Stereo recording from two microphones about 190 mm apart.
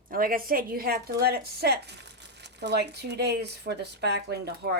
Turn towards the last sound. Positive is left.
turn(degrees=-55)  # may be behind; listen again after turning